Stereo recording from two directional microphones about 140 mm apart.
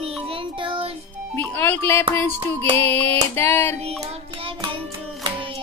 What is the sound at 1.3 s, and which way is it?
Music, 15° left (ahead or behind).